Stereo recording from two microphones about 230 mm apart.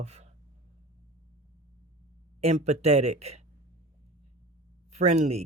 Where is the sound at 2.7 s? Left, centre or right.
Right.